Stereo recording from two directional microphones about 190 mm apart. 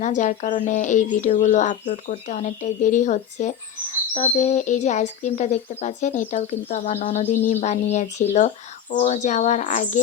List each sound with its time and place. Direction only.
0.0 s speech: 40° left (ahead or behind)